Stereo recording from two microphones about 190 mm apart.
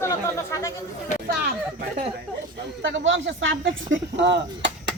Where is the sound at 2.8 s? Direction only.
75° right (ahead or behind).